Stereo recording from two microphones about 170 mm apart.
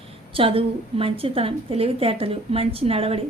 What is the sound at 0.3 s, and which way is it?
A woman's voice, 35° right (ahead or behind).